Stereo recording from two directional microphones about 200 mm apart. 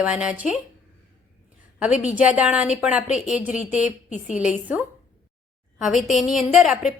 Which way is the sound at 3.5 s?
35° left (ahead or behind).